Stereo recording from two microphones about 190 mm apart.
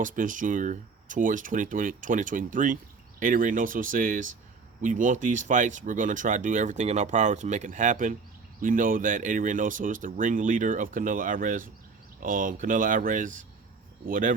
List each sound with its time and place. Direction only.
0.0 s speech: 45° right (ahead or behind)